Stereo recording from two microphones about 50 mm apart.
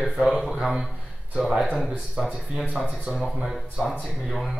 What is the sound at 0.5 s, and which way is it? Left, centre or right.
Speech, centre.